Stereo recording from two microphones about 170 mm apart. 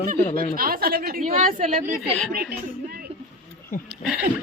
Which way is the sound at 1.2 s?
45° right (ahead or behind).